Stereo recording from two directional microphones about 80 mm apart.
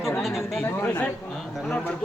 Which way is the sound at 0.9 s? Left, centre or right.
Left.